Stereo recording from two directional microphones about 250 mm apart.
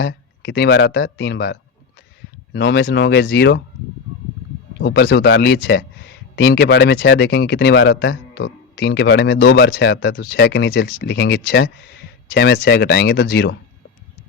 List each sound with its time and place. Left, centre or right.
0.0 s speech: left
4.8 s speech: left